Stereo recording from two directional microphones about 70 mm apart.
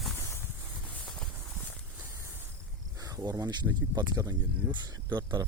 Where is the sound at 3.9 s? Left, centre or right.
Right.